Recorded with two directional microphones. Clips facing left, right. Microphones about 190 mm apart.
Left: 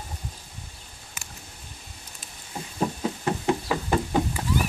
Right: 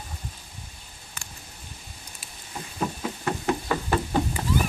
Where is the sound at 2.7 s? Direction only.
20° left (ahead or behind).